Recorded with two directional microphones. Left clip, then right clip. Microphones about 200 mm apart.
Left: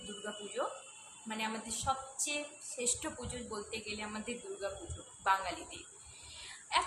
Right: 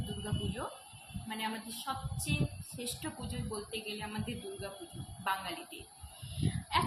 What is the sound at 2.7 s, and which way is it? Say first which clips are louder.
Speech: left 5 dB; 20° left (ahead or behind).